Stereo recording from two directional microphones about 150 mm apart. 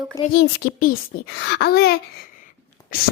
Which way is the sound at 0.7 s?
80° left.